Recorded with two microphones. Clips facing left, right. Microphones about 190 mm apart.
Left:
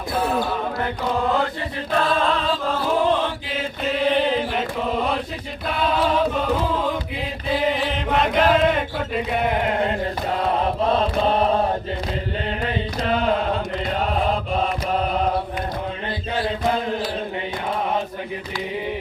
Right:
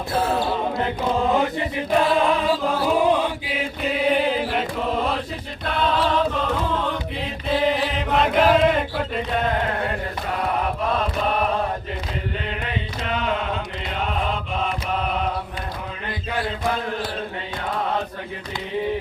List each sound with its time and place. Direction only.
1.3 s chant: 15° right (ahead or behind)
7.7 s chant: centre (ahead or behind)
9.4 s a sound: 15° left (ahead or behind)
10.9 s chant: 30° left (ahead or behind)
12.6 s mantra: 35° left (ahead or behind)
14.0 s chant: 40° left (ahead or behind)
16.3 s chant: 25° left (ahead or behind)